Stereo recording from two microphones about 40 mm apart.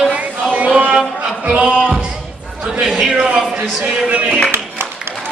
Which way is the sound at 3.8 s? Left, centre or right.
Right.